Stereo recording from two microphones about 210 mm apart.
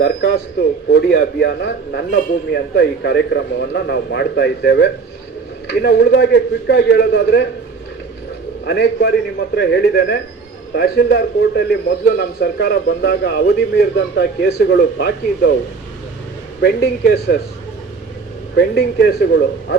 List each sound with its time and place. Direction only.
0.0 s a man's voice: 55° left (ahead or behind)
8.6 s a man's voice: 55° left (ahead or behind)
16.6 s a man's voice: 55° left (ahead or behind)
18.5 s speech: 55° left (ahead or behind)